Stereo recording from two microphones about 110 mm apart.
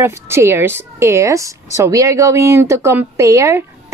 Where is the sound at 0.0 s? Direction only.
25° right (ahead or behind).